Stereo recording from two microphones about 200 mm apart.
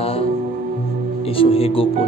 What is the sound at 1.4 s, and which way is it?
Speech, 30° left (ahead or behind).